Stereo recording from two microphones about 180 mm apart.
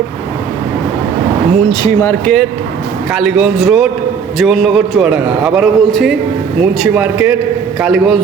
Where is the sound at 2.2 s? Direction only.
5° left (ahead or behind).